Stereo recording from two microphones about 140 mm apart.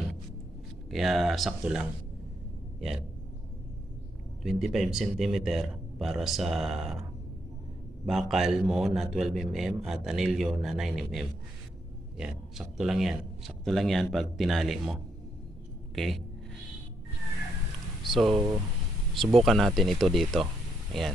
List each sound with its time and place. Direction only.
0.8 s a man's voice: centre (ahead or behind)
4.4 s a man's voice: 5° right (ahead or behind)
18.0 s speech: centre (ahead or behind)
18.3 s speech: 30° right (ahead or behind)
19.1 s a man's voice: centre (ahead or behind)